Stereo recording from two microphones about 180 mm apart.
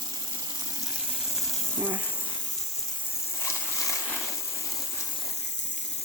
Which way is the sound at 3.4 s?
15° left (ahead or behind).